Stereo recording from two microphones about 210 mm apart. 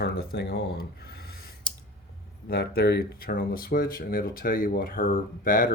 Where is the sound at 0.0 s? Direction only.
45° left (ahead or behind).